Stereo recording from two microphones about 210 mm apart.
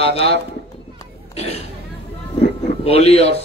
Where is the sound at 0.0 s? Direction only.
30° left (ahead or behind).